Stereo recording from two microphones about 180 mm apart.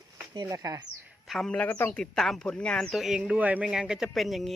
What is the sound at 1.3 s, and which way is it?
A man's voice, 5° left (ahead or behind).